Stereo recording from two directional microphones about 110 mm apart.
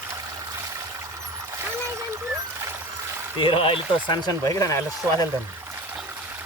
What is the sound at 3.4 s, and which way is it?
Speech, 55° left (ahead or behind).